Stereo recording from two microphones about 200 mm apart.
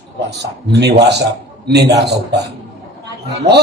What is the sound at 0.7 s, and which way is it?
A man's voice, 55° right (ahead or behind).